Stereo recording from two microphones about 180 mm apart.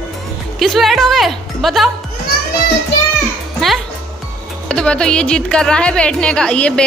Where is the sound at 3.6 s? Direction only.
Centre (ahead or behind).